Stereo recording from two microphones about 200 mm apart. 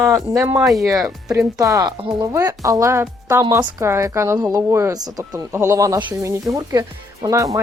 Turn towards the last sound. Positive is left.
turn(degrees=-15)  # may be behind; listen again after turning